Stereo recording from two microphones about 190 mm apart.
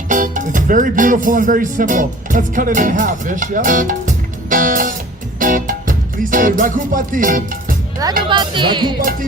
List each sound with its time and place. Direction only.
0.1 s music: 40° right (ahead or behind)
8.3 s speech: 25° right (ahead or behind)